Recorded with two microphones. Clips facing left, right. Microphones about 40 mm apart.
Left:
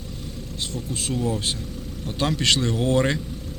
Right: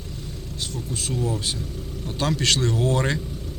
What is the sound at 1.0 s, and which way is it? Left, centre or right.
A man's voice, left.